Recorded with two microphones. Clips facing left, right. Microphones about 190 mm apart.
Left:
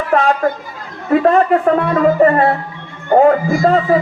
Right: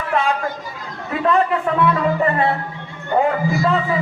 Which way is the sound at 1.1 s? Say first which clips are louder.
Left 7 dB; 45° left (ahead or behind).